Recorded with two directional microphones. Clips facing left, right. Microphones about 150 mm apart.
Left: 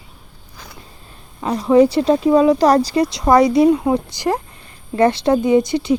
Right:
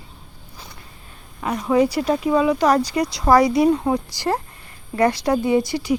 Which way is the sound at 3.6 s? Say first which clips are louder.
Left 4 dB; 15° left (ahead or behind).